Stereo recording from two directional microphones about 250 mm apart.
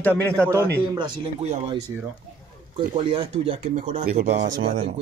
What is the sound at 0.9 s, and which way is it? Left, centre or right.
Speech, centre.